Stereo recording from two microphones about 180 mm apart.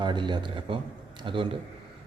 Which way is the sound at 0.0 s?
25° right (ahead or behind).